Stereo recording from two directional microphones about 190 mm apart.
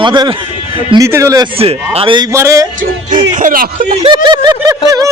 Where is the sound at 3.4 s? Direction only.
45° right (ahead or behind).